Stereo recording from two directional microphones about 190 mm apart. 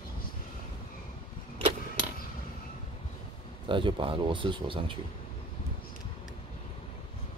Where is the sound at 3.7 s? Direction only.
25° right (ahead or behind).